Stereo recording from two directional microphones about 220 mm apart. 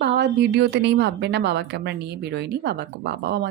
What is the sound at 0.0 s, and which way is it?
A woman's voice, 50° right (ahead or behind).